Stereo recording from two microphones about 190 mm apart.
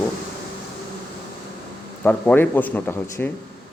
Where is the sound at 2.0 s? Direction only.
10° left (ahead or behind).